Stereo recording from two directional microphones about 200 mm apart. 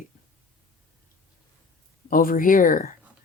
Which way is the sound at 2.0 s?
45° left (ahead or behind).